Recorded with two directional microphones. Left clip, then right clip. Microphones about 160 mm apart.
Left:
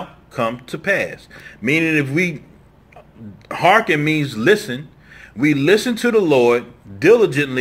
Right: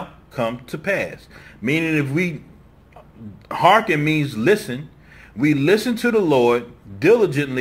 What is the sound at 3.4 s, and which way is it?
Speech, 30° left (ahead or behind).